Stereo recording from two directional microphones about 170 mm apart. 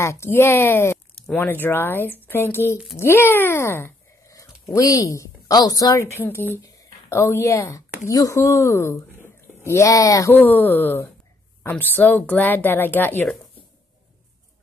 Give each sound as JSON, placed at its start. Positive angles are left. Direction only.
{"t": 0.0, "sound": "a woman's voice", "side_deg": 15}